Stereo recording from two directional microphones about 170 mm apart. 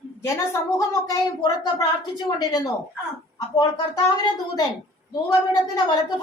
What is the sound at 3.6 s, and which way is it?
A woman's voice, 25° left (ahead or behind).